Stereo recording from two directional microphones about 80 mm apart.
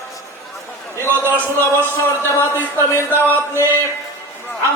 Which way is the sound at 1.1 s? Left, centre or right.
Right.